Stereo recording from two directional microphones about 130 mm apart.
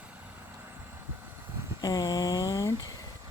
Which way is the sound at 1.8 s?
30° left (ahead or behind).